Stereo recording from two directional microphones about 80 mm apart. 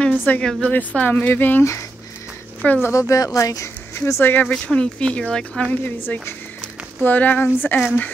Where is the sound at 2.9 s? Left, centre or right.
Left.